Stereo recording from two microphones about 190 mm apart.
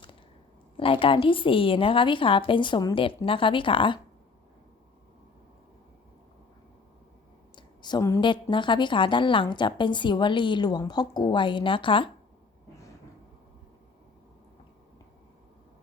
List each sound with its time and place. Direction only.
0.8 s a woman's voice: 30° left (ahead or behind)
7.5 s a woman's voice: 25° left (ahead or behind)